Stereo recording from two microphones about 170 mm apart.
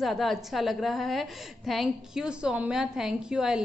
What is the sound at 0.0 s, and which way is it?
A woman's voice, centre (ahead or behind).